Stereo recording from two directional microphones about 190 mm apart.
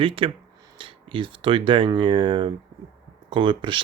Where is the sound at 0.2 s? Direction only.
30° right (ahead or behind).